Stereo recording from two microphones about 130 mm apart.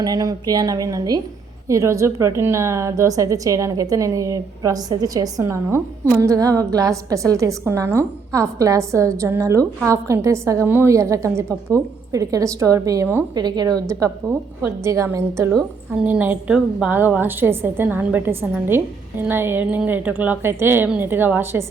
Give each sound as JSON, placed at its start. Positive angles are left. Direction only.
{"t": 0.0, "sound": "a woman's voice", "side_deg": -30}
{"t": 15.9, "sound": "a woman's voice", "side_deg": -10}